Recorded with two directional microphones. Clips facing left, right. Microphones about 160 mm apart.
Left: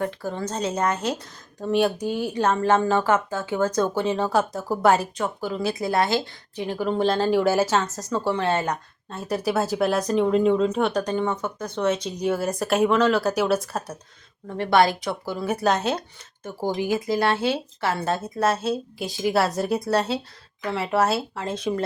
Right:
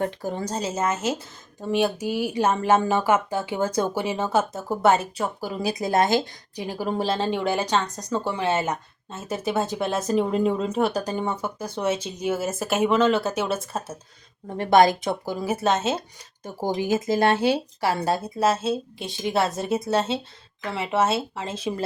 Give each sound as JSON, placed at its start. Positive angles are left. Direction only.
{"t": 0.2, "sound": "speech", "side_deg": -15}
{"t": 14.4, "sound": "speech", "side_deg": -20}
{"t": 16.4, "sound": "speech", "side_deg": -15}